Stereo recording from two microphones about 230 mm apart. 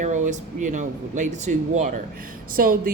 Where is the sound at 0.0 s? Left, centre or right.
Right.